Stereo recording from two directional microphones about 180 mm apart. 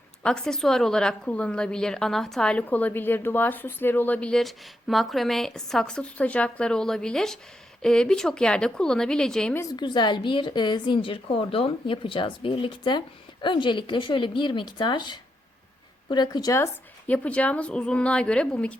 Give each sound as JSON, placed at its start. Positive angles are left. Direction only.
{"t": 0.2, "sound": "a woman's voice", "side_deg": 5}
{"t": 9.7, "sound": "a woman's voice", "side_deg": 25}
{"t": 17.1, "sound": "speech", "side_deg": 5}